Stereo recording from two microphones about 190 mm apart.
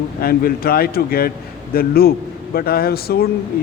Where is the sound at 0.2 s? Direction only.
50° left (ahead or behind).